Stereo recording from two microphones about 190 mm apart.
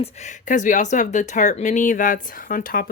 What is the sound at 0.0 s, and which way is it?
Speech, 40° left (ahead or behind).